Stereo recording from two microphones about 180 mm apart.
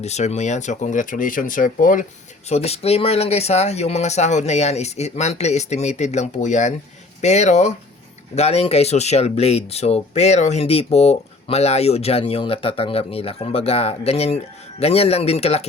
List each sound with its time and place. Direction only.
0.0 s speech: 40° left (ahead or behind)
2.5 s speech: 35° left (ahead or behind)